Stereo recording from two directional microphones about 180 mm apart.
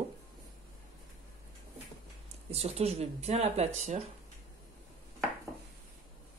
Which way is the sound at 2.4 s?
35° right (ahead or behind).